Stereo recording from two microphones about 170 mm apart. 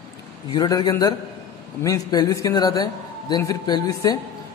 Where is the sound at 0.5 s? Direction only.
20° left (ahead or behind).